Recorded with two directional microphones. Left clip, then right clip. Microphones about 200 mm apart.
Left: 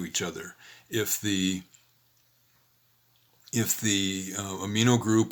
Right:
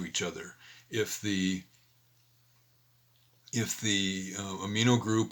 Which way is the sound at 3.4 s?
30° left (ahead or behind).